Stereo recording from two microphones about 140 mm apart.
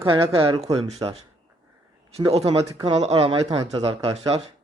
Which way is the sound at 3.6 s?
30° right (ahead or behind).